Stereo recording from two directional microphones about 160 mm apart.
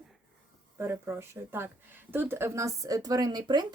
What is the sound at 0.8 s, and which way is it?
Speech, 15° right (ahead or behind).